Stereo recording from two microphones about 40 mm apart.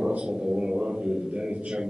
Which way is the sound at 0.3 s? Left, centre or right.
Centre.